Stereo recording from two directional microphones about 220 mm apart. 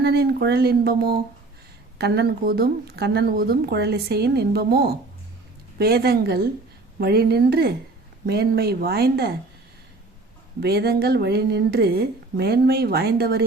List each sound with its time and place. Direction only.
0.0 s speech: 45° right (ahead or behind)
10.6 s speech: 45° right (ahead or behind)